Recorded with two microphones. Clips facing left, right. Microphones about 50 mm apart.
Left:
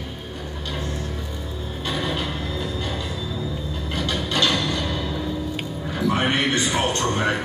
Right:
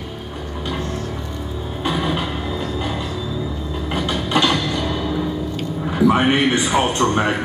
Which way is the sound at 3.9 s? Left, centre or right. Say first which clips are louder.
Right 5 dB; centre.